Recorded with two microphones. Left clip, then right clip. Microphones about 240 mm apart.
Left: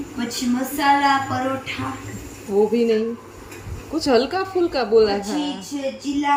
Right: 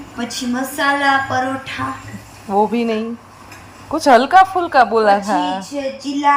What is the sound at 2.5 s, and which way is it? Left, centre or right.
Speech, right.